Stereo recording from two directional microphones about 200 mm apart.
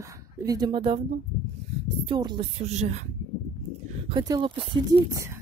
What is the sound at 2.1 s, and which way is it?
Speech, 25° right (ahead or behind).